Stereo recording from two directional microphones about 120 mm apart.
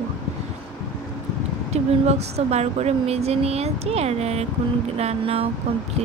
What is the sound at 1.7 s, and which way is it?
Speech, 65° right (ahead or behind).